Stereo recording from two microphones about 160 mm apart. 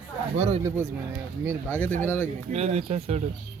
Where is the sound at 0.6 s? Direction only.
15° right (ahead or behind).